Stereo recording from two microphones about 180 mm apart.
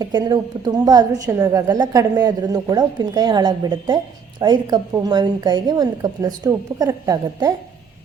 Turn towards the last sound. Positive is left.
turn(degrees=-20)  # may be behind; listen again after turning